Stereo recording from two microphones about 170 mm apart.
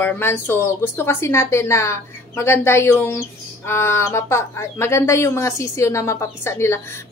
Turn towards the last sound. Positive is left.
turn(degrees=15)  # may be behind; listen again after turning